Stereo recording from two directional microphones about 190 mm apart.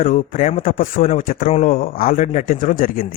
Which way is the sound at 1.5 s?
35° left (ahead or behind).